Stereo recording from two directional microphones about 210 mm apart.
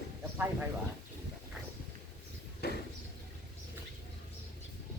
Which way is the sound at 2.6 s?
50° left (ahead or behind).